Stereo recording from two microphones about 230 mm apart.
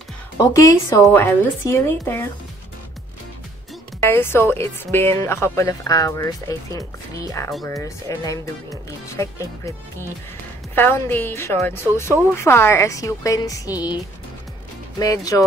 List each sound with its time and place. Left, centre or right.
0.4 s speech: centre
4.0 s speech: centre
15.0 s speech: centre